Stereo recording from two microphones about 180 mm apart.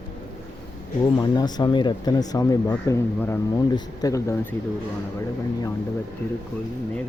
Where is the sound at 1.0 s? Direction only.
25° left (ahead or behind).